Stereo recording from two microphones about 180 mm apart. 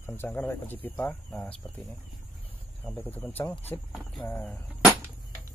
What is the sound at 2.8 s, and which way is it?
Speech, 10° left (ahead or behind).